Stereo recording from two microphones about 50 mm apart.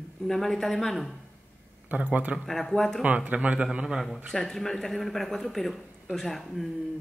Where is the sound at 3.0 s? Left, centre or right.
Right.